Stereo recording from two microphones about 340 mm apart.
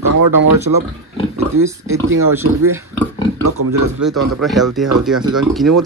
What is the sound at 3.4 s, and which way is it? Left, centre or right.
Speech, right.